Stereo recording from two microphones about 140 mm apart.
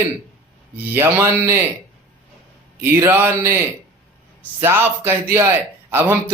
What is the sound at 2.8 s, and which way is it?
Speech, 20° right (ahead or behind).